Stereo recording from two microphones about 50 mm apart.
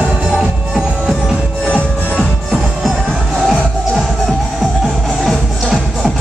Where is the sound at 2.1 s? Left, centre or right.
Centre.